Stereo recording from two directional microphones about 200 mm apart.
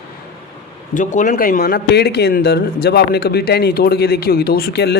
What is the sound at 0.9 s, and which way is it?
A woman's voice, 40° left (ahead or behind).